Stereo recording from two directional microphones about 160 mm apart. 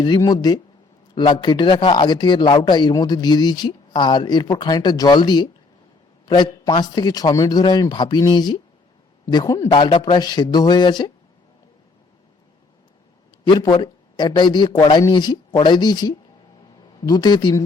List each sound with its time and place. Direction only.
0.2 s a man's voice: 25° left (ahead or behind)
13.6 s a man's voice: 25° left (ahead or behind)